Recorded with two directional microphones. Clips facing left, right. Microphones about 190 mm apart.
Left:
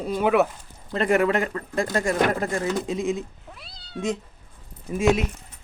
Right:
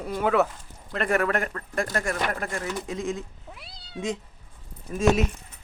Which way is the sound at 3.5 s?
10° right (ahead or behind).